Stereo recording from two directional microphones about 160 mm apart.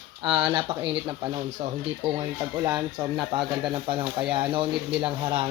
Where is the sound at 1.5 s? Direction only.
45° right (ahead or behind).